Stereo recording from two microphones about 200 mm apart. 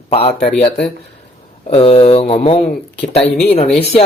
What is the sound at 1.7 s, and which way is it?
Speech, 30° left (ahead or behind).